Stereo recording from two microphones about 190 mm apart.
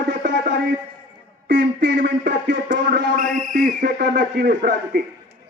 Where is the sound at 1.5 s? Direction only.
70° right (ahead or behind).